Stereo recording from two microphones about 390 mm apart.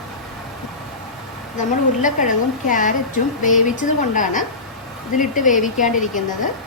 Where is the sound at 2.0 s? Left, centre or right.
Centre.